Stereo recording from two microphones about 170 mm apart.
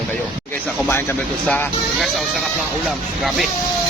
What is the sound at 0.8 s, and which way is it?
A man's voice, 15° left (ahead or behind).